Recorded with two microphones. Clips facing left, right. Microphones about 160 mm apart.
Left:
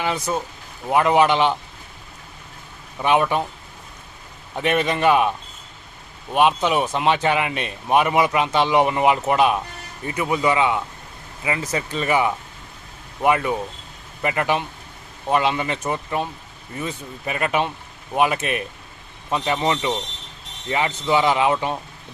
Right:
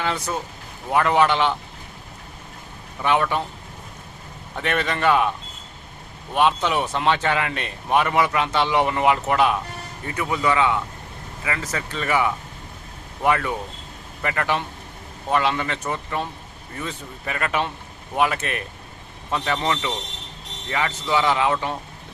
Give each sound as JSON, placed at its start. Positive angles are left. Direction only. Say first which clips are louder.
{"t": 0.0, "sound": "speech", "louder": "left 2 dB", "side_deg": 15}
{"t": 3.0, "sound": "speech", "louder": "left 2 dB", "side_deg": 15}
{"t": 4.5, "sound": "speech", "louder": "left 4 dB", "side_deg": 15}
{"t": 6.3, "sound": "speech", "louder": "left 2 dB", "side_deg": 15}